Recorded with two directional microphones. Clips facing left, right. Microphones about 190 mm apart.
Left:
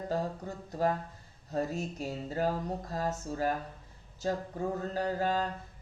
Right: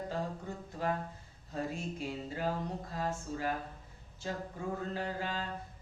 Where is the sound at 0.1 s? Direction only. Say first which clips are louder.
Left 4 dB; 40° left (ahead or behind).